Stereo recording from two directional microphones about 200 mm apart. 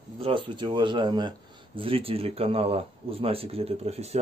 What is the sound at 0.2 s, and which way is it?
Speech, 25° right (ahead or behind).